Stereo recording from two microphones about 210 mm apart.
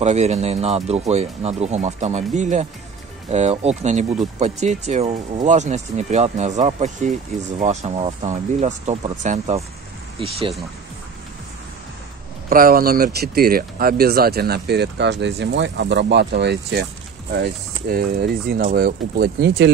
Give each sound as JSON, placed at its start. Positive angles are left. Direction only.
{"t": 0.0, "sound": "speech", "side_deg": -35}
{"t": 12.4, "sound": "speech", "side_deg": -45}
{"t": 17.9, "sound": "speech", "side_deg": -45}